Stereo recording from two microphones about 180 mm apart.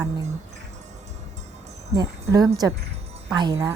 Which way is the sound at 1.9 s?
20° right (ahead or behind).